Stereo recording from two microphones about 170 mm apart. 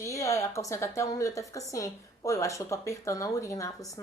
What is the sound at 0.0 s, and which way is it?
A woman's voice, 20° left (ahead or behind).